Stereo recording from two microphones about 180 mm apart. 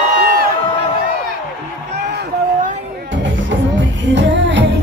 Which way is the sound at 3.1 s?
90° right.